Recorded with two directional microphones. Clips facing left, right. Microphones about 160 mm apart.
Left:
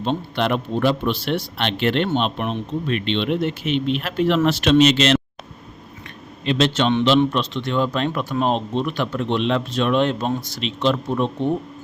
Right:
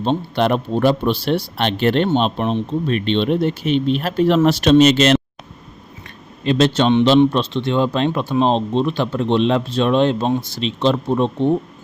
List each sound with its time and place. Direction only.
0.0 s speech: 40° right (ahead or behind)
6.4 s speech: 40° right (ahead or behind)